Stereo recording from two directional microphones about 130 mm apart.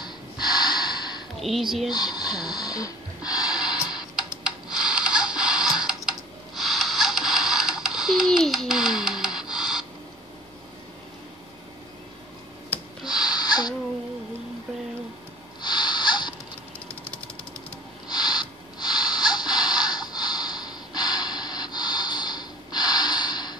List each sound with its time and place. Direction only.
0.0 s snort: 35° left (ahead or behind)
1.4 s speech: centre (ahead or behind)
1.9 s speech: 30° left (ahead or behind)
3.7 s typing: 5° right (ahead or behind)
13.0 s a sound: 30° left (ahead or behind)
15.6 s snort: 35° left (ahead or behind)
18.0 s a sound: 30° left (ahead or behind)